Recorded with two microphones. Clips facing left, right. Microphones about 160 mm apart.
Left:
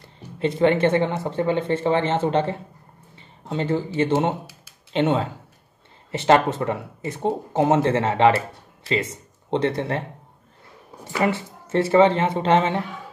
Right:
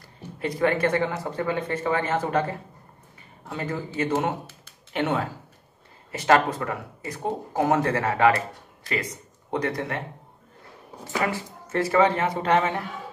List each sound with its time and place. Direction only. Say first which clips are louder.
0.4 s speech: left 5 dB; 25° left (ahead or behind)
11.2 s speech: left 5 dB; 25° left (ahead or behind)